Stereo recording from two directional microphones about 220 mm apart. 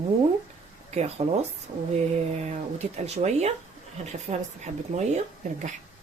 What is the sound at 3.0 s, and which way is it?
Speech, 30° right (ahead or behind).